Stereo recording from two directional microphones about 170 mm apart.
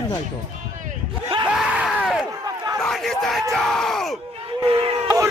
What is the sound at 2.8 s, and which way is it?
Crowd, centre (ahead or behind).